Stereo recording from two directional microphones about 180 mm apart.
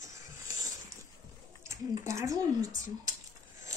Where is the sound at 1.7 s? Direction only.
15° right (ahead or behind).